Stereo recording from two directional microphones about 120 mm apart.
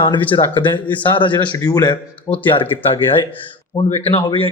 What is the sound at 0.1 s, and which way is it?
Speech, 40° left (ahead or behind).